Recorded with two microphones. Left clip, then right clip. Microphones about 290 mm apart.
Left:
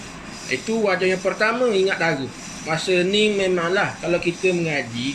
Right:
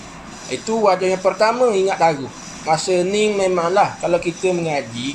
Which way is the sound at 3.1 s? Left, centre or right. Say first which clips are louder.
Right 2 dB; centre.